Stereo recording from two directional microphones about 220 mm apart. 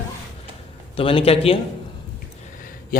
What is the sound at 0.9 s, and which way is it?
Speech, 25° left (ahead or behind).